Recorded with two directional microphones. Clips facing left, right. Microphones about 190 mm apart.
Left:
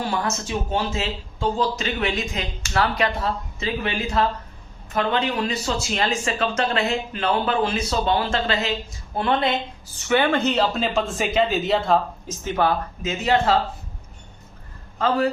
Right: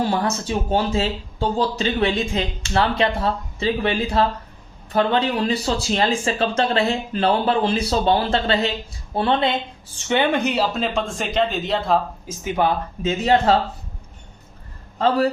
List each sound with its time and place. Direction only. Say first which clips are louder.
0.0 s speech: right 4 dB; 35° right (ahead or behind); by 11.9 s centre (ahead or behind)
12.3 s speech: right 1 dB; 15° right (ahead or behind)
13.0 s speech: right 4 dB; 30° right (ahead or behind)
14.9 s a man's voice: right 2 dB; 35° right (ahead or behind)